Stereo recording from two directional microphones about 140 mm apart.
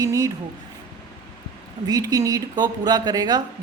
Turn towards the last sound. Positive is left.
turn(degrees=-30)  # may be behind; listen again after turning